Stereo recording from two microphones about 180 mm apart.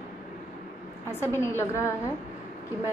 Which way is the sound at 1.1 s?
15° left (ahead or behind).